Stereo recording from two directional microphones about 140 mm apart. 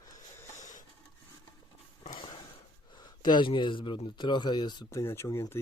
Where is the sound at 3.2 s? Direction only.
35° left (ahead or behind).